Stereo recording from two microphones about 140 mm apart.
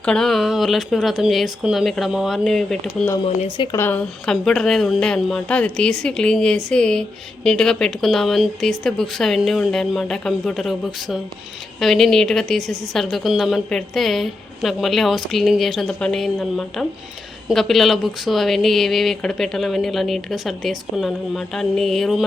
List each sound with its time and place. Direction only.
0.0 s a woman's voice: 5° left (ahead or behind)
3.2 s a woman's voice: 45° left (ahead or behind)
3.7 s speech: 15° left (ahead or behind)
4.3 s a woman's voice: 5° left (ahead or behind)